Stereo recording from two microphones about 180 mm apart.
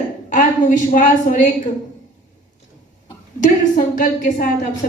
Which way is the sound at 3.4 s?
45° left (ahead or behind).